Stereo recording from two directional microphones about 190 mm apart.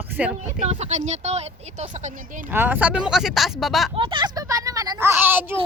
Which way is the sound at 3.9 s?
25° right (ahead or behind).